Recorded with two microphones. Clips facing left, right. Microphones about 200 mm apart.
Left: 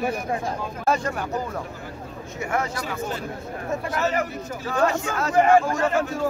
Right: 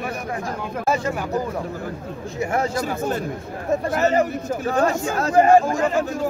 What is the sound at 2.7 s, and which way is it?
Speech, 45° right (ahead or behind).